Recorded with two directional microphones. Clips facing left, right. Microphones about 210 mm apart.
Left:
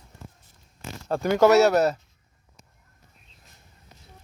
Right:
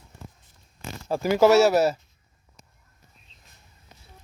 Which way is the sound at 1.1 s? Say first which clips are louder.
Even; 5° right (ahead or behind).